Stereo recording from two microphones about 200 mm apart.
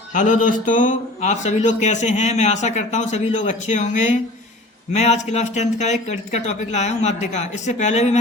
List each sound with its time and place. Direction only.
0.1 s speech: 40° left (ahead or behind)